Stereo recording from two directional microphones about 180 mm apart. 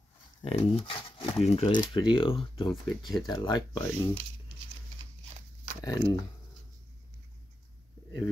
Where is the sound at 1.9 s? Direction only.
25° left (ahead or behind).